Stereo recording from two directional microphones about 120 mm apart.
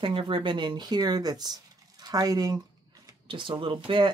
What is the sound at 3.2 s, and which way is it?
Speech, 45° right (ahead or behind).